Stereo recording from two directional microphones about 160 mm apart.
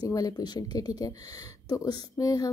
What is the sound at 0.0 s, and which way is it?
Speech, 25° left (ahead or behind).